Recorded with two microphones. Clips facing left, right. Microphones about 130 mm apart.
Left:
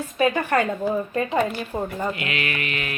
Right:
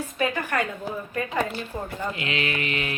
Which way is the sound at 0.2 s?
25° left (ahead or behind).